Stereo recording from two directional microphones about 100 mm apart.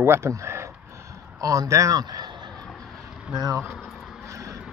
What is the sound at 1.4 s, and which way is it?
A man's voice, 35° right (ahead or behind).